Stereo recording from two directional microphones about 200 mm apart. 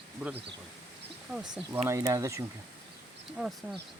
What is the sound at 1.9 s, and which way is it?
Speech, 15° right (ahead or behind).